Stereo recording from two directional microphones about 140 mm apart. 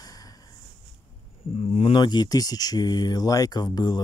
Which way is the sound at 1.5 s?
45° left (ahead or behind).